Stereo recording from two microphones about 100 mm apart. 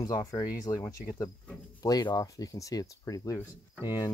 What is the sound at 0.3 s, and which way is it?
Speech, 40° left (ahead or behind).